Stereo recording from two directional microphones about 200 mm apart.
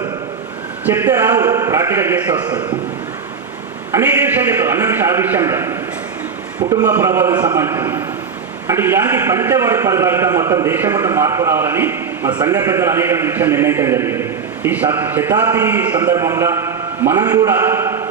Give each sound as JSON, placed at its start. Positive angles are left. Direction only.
{"t": 0.9, "sound": "a man's voice", "side_deg": -10}
{"t": 2.5, "sound": "a man's voice", "side_deg": -20}
{"t": 3.9, "sound": "a man's voice", "side_deg": -10}
{"t": 6.8, "sound": "a man's voice", "side_deg": -10}